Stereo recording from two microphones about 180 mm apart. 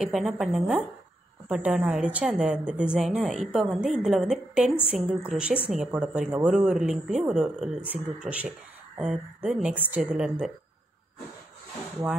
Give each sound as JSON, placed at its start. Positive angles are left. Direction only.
{"t": 0.0, "sound": "a woman's voice", "side_deg": 0}